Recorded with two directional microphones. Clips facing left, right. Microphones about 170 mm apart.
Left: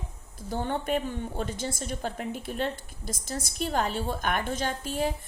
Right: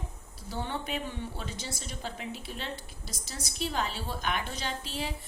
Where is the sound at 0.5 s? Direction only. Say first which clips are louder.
Left 6 dB; 50° left (ahead or behind).